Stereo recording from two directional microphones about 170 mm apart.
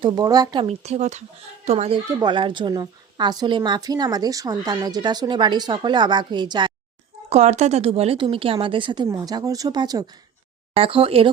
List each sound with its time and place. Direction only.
0.0 s a woman's voice: 20° right (ahead or behind)
7.3 s a woman's voice: 40° right (ahead or behind)